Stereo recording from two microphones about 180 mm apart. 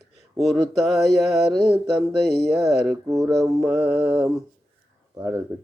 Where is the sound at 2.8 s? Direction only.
15° right (ahead or behind).